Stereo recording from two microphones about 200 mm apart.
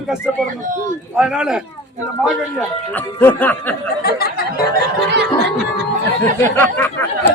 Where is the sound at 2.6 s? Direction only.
10° left (ahead or behind).